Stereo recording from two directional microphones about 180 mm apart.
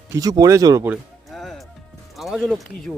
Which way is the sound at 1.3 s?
Centre (ahead or behind).